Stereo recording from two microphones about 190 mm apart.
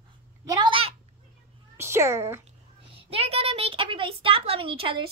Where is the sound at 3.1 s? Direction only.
30° right (ahead or behind).